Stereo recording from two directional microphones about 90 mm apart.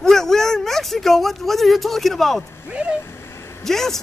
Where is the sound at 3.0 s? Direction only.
30° left (ahead or behind).